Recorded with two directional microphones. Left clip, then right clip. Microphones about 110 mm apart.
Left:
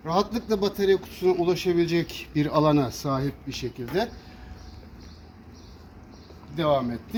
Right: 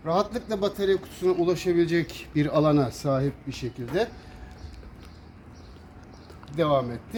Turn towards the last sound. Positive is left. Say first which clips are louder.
# left 1 dB
turn(degrees=-30)  # may be behind; listen again after turning